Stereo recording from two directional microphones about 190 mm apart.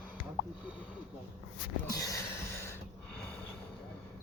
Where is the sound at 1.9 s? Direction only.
20° left (ahead or behind).